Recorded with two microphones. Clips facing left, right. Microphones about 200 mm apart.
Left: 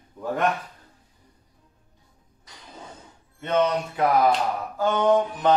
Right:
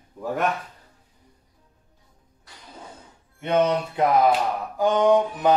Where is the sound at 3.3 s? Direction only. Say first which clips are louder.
Right 2 dB; 15° right (ahead or behind).